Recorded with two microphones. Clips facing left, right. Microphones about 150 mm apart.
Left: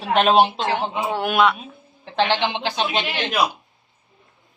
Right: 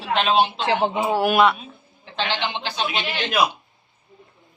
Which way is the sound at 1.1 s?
5° right (ahead or behind).